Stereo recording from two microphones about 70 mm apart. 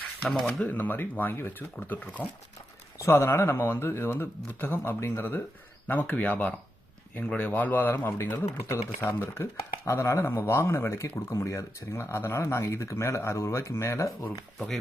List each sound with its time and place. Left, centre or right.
0.2 s speech: centre
0.6 s speech: left
3.0 s speech: left
8.6 s speech: left